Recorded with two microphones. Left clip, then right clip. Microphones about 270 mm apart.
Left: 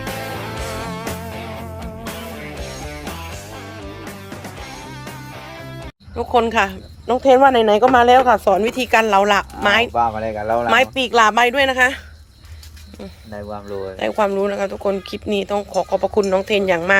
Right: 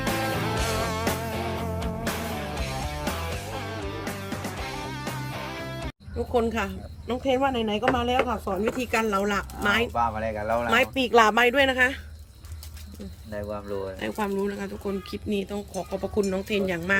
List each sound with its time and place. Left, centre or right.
0.0 s music: centre
3.5 s music: centre
6.3 s speech: centre
7.3 s speech: left
8.0 s speech: centre
10.0 s speech: left
10.7 s speech: centre
13.3 s speech: left
14.0 s speech: centre